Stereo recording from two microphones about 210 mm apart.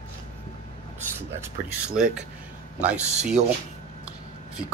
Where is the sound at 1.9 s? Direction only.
5° right (ahead or behind).